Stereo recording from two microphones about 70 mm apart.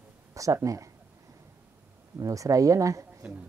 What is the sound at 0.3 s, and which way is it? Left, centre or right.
Speech, right.